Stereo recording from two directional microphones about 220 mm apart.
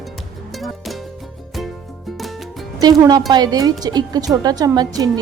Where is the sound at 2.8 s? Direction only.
20° right (ahead or behind).